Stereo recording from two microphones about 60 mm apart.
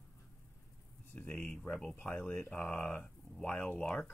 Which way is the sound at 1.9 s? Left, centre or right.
Left.